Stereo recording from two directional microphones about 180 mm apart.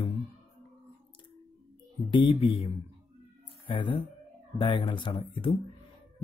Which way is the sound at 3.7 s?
25° left (ahead or behind).